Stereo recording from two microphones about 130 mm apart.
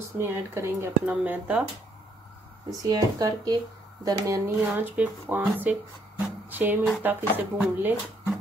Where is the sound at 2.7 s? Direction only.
25° right (ahead or behind).